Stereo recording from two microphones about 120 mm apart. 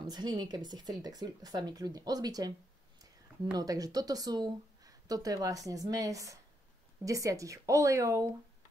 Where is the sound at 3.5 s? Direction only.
30° right (ahead or behind).